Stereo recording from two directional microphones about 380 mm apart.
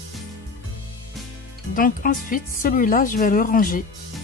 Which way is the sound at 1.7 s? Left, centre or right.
Left.